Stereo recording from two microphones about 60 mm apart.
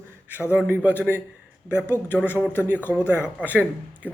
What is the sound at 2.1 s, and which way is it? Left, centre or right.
A man's voice, right.